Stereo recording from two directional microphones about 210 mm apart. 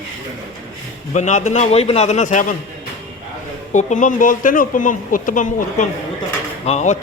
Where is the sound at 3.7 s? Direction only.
35° left (ahead or behind).